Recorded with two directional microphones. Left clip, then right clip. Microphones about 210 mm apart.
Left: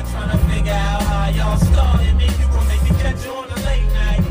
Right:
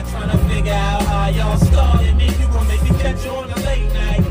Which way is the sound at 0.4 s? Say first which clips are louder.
Right 2 dB; 40° left (ahead or behind).